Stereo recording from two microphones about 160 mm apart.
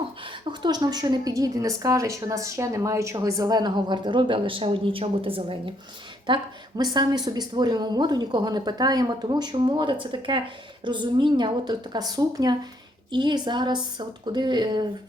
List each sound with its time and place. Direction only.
0.6 s a woman's voice: 25° right (ahead or behind)